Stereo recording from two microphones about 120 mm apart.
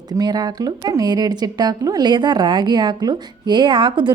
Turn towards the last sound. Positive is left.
turn(degrees=-40)  # may be behind; listen again after turning